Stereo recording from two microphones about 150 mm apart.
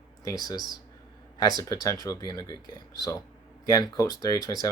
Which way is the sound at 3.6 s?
25° left (ahead or behind).